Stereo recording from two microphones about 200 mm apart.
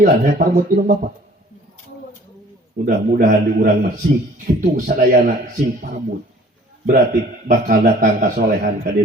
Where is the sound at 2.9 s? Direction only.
45° right (ahead or behind).